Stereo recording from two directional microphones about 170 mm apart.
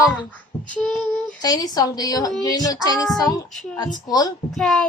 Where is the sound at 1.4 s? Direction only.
20° left (ahead or behind).